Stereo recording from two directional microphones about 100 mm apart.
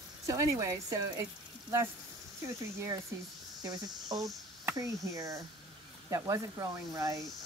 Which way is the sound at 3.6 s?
35° right (ahead or behind).